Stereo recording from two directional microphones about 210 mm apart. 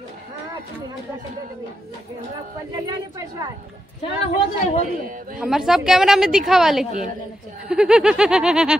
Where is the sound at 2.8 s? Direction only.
20° right (ahead or behind).